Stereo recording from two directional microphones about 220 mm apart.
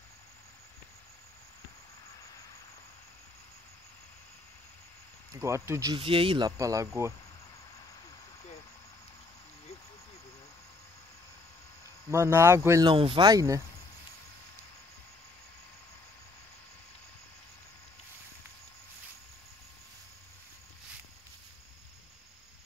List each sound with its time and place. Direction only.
5.4 s speech: 15° right (ahead or behind)
12.1 s speech: 10° right (ahead or behind)